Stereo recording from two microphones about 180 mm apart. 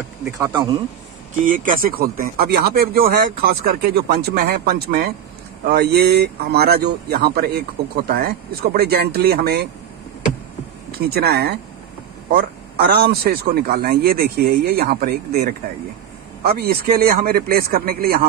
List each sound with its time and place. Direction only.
0.4 s speech: 15° right (ahead or behind)
1.4 s speech: 50° right (ahead or behind)
10.9 s speech: 60° right (ahead or behind)